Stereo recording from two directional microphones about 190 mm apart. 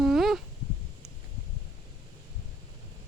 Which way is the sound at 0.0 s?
Centre (ahead or behind).